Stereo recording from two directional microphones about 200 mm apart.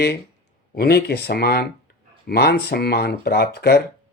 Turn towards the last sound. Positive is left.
turn(degrees=50)  # may be behind; listen again after turning